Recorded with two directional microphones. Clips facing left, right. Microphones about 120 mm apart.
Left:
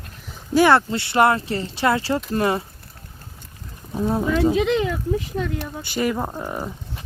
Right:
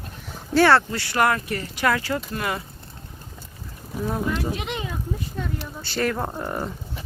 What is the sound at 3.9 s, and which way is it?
Speech, 25° left (ahead or behind).